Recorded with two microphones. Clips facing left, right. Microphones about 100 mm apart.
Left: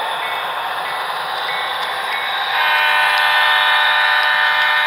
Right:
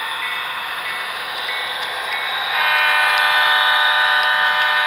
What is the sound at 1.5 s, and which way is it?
Vehicle, centre (ahead or behind).